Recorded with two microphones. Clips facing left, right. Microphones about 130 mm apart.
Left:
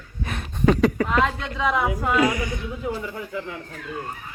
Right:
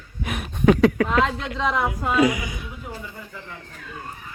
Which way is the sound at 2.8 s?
90° left.